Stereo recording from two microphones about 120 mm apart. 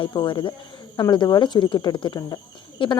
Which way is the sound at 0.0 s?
40° left (ahead or behind).